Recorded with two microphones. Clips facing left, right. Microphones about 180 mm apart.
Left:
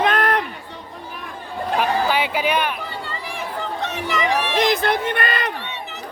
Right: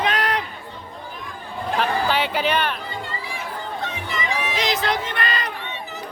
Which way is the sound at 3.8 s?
70° left (ahead or behind).